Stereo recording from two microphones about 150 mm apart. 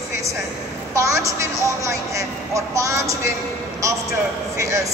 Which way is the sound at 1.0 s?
20° right (ahead or behind).